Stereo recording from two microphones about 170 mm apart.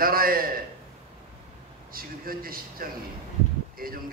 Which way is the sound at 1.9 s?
60° right (ahead or behind).